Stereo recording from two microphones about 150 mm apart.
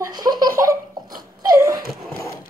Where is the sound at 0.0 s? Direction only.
25° right (ahead or behind).